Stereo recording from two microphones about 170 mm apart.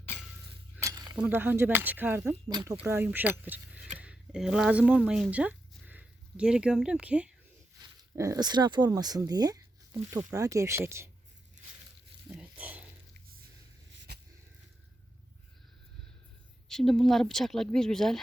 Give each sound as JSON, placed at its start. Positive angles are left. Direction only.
{"t": 0.8, "sound": "cutlery", "side_deg": -20}
{"t": 1.1, "sound": "speech", "side_deg": -10}
{"t": 7.8, "sound": "speech", "side_deg": -20}
{"t": 12.3, "sound": "a sound", "side_deg": -10}
{"t": 16.6, "sound": "speech", "side_deg": 5}